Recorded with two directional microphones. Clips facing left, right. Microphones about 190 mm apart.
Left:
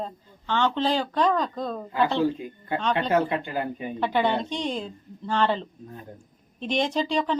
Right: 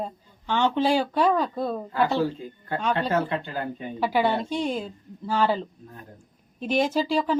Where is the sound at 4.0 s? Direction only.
5° right (ahead or behind).